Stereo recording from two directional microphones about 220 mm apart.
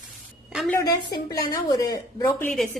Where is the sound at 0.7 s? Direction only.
15° left (ahead or behind).